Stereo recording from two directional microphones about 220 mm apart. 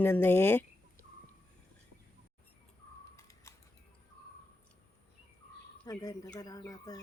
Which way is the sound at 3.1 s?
15° left (ahead or behind).